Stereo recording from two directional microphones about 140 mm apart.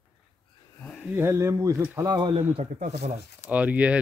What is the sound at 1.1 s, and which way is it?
Speech, 20° right (ahead or behind).